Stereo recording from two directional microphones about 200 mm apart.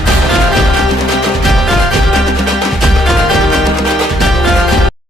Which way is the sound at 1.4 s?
Centre (ahead or behind).